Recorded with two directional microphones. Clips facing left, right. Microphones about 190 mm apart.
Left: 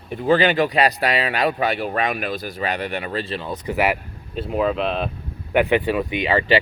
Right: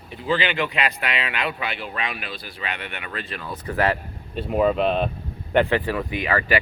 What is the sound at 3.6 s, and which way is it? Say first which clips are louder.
Speech: left 1 dB; 15° left (ahead or behind).